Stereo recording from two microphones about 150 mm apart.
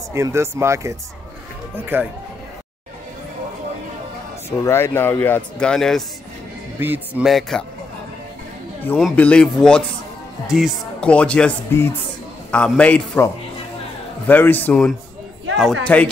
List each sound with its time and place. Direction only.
0.1 s speech: 20° right (ahead or behind)
4.5 s speech: 15° left (ahead or behind)
6.8 s speech: 15° right (ahead or behind)
7.2 s a man's voice: centre (ahead or behind)
9.1 s a man's voice: 10° left (ahead or behind)
11.0 s speech: 5° left (ahead or behind)
15.5 s a man's voice: centre (ahead or behind)